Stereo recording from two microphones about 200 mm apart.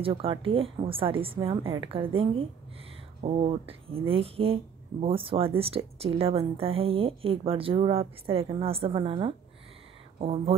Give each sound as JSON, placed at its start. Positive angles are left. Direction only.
{"t": 0.0, "sound": "a woman's voice", "side_deg": -30}